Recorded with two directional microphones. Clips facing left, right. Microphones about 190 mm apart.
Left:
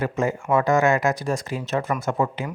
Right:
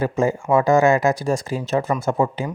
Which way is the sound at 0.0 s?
30° right (ahead or behind).